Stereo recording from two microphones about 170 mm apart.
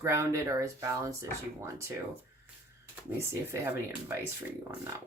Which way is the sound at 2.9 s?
15° right (ahead or behind).